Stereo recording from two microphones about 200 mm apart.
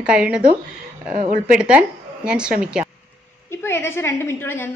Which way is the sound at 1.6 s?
5° right (ahead or behind).